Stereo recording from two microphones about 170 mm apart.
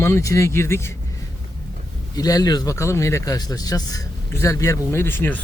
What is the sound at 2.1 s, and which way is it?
Speech, 20° left (ahead or behind).